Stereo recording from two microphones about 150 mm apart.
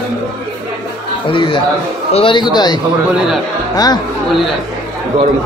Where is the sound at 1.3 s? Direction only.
35° left (ahead or behind).